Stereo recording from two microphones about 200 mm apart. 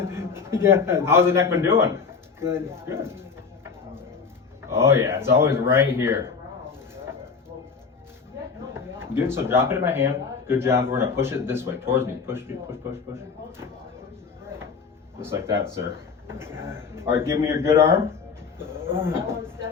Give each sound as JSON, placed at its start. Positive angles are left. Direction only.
{"t": 0.0, "sound": "a man's voice", "side_deg": -15}
{"t": 4.7, "sound": "speech", "side_deg": -15}
{"t": 8.7, "sound": "speech", "side_deg": -10}
{"t": 15.2, "sound": "speech", "side_deg": -15}
{"t": 18.9, "sound": "speech", "side_deg": -10}